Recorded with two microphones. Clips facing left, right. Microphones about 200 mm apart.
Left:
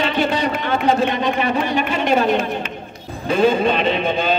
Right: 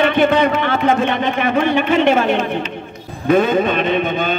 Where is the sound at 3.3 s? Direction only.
55° right (ahead or behind).